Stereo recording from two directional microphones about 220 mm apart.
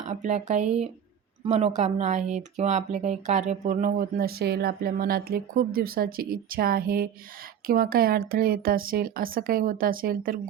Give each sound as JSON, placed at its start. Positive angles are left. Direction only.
{"t": 0.0, "sound": "speech", "side_deg": -35}